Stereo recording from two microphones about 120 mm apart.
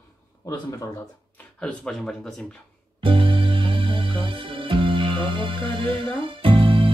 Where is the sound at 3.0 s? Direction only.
45° right (ahead or behind).